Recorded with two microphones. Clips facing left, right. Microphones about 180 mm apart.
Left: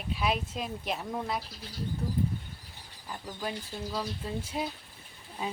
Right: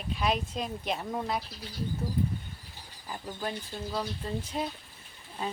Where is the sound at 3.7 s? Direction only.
5° left (ahead or behind).